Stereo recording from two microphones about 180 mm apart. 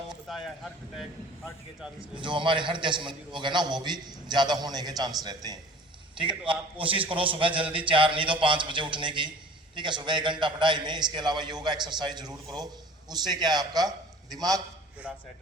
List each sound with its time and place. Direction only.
0.3 s speech: centre (ahead or behind)
2.1 s a man's voice: 25° right (ahead or behind)
15.1 s speech: 5° right (ahead or behind)